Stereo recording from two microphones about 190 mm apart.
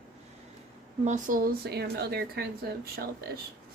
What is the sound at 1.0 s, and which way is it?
Speech, 40° right (ahead or behind).